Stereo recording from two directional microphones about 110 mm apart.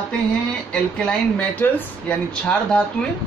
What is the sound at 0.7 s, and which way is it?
Speech, 10° left (ahead or behind).